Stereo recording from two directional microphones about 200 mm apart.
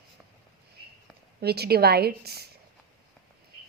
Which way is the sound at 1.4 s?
50° right (ahead or behind).